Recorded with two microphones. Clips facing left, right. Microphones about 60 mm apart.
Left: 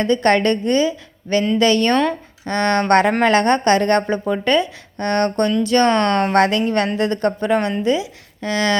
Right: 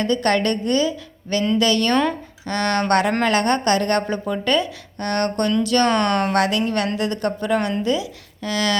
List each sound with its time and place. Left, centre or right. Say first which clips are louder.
0.0 s a woman's voice: left 4 dB; left